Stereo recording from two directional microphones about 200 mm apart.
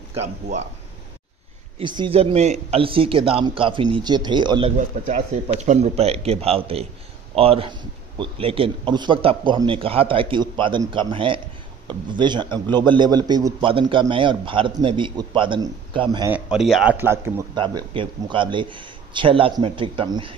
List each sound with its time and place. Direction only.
0.2 s speech: 35° right (ahead or behind)
1.8 s a man's voice: 25° right (ahead or behind)
4.7 s a man's voice: 35° right (ahead or behind)
16.3 s a man's voice: 5° right (ahead or behind)
17.6 s a man's voice: 25° right (ahead or behind)